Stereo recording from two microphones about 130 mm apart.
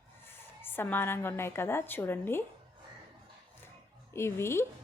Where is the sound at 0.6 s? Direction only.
15° left (ahead or behind).